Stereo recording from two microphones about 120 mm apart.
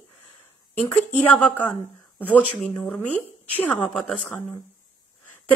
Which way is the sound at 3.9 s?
Centre (ahead or behind).